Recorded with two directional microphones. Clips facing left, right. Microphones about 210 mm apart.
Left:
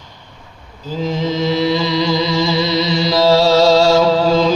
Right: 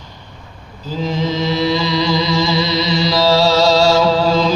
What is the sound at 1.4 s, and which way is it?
Music, 50° left (ahead or behind).